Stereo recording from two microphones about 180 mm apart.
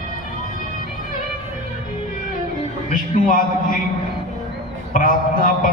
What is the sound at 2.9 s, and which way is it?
Speech, 50° left (ahead or behind).